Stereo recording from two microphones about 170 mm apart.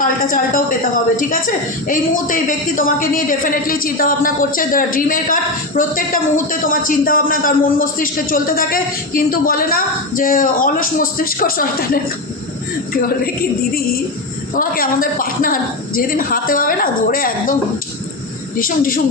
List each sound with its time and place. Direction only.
0.0 s a woman's voice: 55° left (ahead or behind)
12.9 s a woman's voice: 60° left (ahead or behind)